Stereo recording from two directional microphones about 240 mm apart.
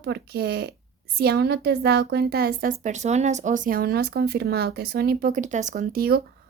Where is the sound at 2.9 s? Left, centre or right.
Right.